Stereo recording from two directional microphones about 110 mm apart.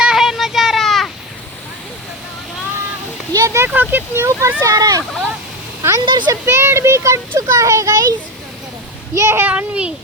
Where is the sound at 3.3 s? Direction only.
30° right (ahead or behind).